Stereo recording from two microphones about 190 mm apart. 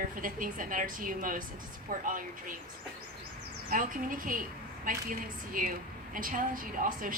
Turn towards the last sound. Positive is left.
turn(degrees=-45)  # may be behind; listen again after turning